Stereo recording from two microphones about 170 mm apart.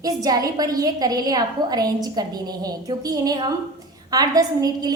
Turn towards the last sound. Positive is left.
turn(degrees=-20)  # may be behind; listen again after turning